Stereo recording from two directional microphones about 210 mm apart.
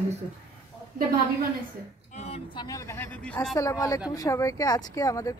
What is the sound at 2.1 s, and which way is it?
Speech, 30° left (ahead or behind).